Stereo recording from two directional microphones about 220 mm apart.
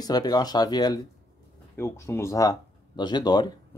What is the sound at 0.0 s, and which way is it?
Speech, 20° left (ahead or behind).